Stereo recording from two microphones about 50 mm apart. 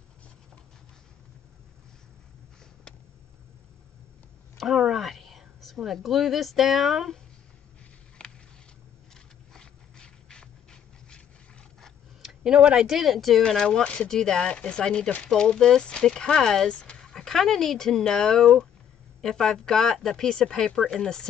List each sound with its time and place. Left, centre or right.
4.6 s a sound: centre
9.5 s a sound: centre
12.2 s tick-tock: centre
12.5 s speech: right
12.8 s speech: centre
13.5 s speech: centre